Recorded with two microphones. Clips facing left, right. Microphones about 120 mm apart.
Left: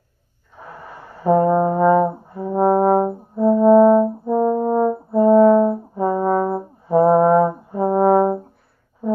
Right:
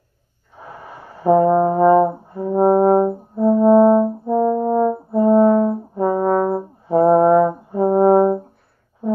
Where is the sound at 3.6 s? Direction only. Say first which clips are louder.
Left 1 dB; 15° right (ahead or behind).